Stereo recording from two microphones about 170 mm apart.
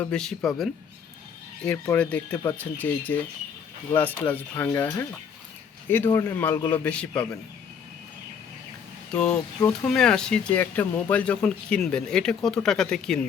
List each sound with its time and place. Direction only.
0.0 s speech: 5° left (ahead or behind)
9.1 s speech: 5° left (ahead or behind)